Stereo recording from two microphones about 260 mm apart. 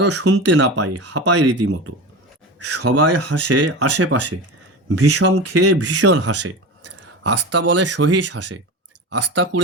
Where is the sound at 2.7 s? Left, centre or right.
Right.